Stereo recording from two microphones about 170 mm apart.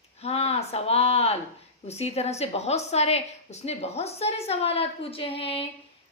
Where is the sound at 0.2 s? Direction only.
35° left (ahead or behind).